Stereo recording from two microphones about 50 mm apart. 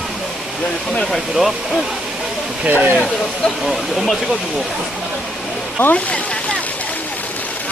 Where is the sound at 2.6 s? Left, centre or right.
Right.